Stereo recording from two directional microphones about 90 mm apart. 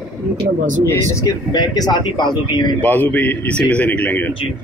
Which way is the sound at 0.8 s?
30° left (ahead or behind).